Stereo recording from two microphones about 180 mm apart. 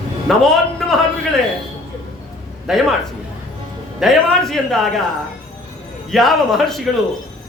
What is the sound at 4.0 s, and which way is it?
Speech, centre (ahead or behind).